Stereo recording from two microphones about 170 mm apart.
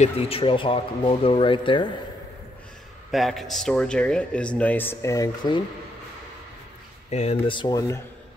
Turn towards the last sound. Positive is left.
turn(degrees=25)  # may be behind; listen again after turning